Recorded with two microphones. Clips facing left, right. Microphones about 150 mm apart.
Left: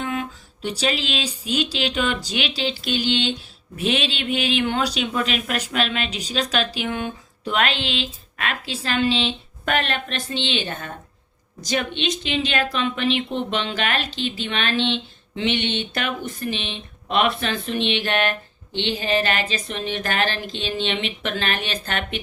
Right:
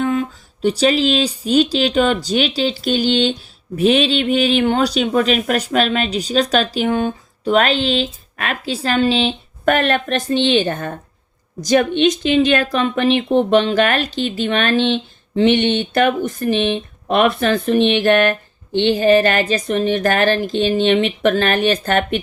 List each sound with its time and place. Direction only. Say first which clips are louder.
0.0 s speech: right 8 dB; 40° right (ahead or behind)